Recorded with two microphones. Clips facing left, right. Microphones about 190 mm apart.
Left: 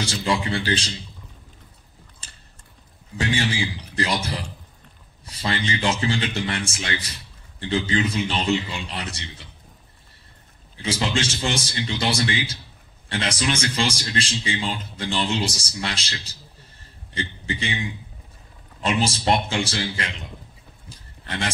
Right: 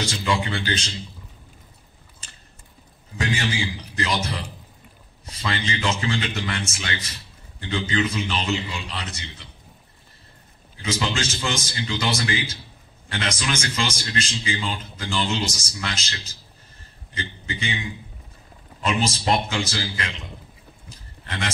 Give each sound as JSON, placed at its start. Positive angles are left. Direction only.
{"t": 0.0, "sound": "a man's voice", "side_deg": 30}
{"t": 3.2, "sound": "a man's voice", "side_deg": 30}
{"t": 10.8, "sound": "a man's voice", "side_deg": 30}
{"t": 18.8, "sound": "speech", "side_deg": 30}